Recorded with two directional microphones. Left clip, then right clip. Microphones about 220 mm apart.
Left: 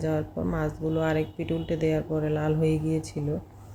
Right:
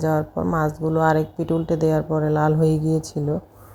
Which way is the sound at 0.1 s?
10° right (ahead or behind).